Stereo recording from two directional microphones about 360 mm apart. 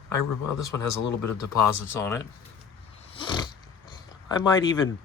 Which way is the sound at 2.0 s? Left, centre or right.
Centre.